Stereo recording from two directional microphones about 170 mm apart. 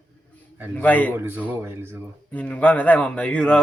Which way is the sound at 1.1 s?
15° right (ahead or behind).